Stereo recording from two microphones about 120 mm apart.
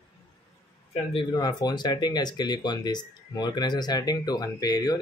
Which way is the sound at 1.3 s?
35° left (ahead or behind).